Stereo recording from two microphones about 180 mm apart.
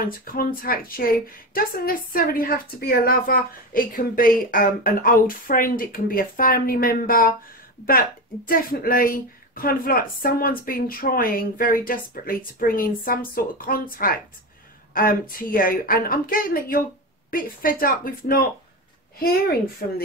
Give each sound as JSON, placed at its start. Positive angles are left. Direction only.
{"t": 0.0, "sound": "a woman's voice", "side_deg": 55}